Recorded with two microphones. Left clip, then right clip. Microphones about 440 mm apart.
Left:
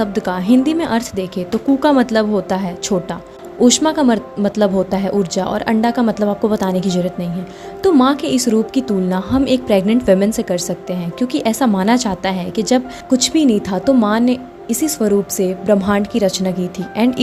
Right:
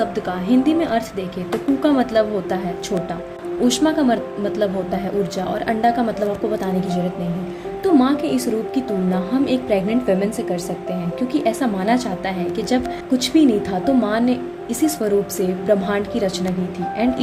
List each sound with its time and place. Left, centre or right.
0.0 s speech: centre
3.6 s a woman's voice: centre